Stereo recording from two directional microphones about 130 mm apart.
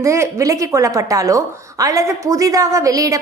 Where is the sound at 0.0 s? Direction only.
25° right (ahead or behind).